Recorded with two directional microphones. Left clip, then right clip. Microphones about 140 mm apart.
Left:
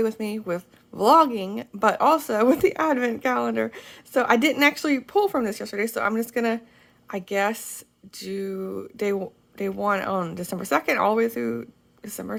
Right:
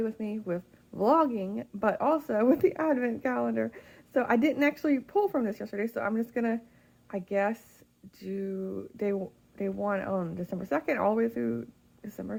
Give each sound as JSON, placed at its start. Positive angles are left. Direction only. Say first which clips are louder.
{"t": 0.0, "sound": "speech", "louder": "left 8 dB", "side_deg": 20}
{"t": 8.6, "sound": "speech", "louder": "left 6 dB", "side_deg": 25}